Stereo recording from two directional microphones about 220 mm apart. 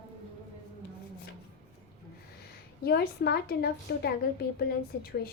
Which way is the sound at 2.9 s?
45° left (ahead or behind).